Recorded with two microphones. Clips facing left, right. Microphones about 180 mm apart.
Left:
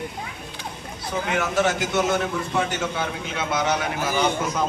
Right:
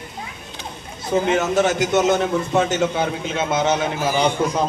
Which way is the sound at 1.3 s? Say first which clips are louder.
Right 2 dB; 20° right (ahead or behind).